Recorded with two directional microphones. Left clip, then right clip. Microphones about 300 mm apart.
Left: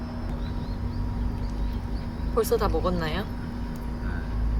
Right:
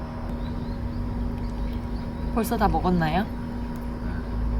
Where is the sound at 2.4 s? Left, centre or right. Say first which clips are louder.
Even; right.